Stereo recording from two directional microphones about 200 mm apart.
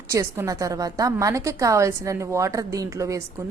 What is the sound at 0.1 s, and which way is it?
A woman's voice, 15° right (ahead or behind).